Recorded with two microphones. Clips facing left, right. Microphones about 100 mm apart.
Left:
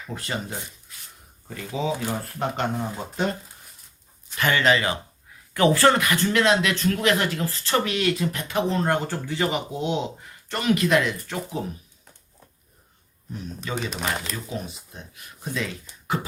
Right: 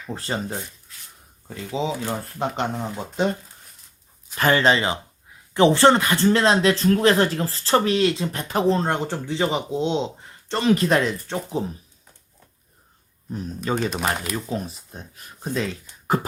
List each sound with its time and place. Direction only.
0.1 s speech: 35° right (ahead or behind)
1.5 s speech: 20° right (ahead or behind)
4.4 s speech: 35° right (ahead or behind)
13.7 s speech: 40° right (ahead or behind)